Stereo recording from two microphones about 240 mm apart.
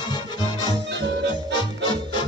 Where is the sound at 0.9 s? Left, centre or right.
Right.